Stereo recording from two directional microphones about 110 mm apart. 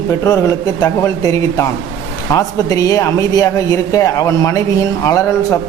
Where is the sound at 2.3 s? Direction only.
30° left (ahead or behind).